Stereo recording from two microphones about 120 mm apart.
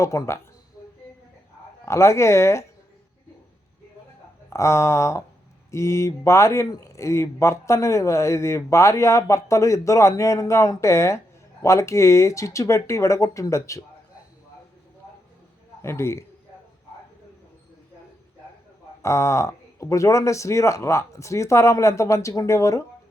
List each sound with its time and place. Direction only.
0.0 s a man's voice: 25° left (ahead or behind)
1.8 s a man's voice: 25° left (ahead or behind)
4.4 s a man's voice: 25° left (ahead or behind)
15.0 s a sound: 25° left (ahead or behind)
15.8 s a man's voice: 20° left (ahead or behind)
19.0 s a man's voice: 25° left (ahead or behind)